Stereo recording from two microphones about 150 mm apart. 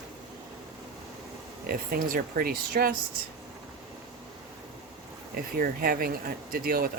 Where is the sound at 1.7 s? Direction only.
70° right (ahead or behind).